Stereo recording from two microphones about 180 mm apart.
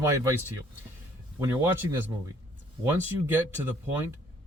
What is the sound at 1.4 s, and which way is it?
Speech, 15° right (ahead or behind).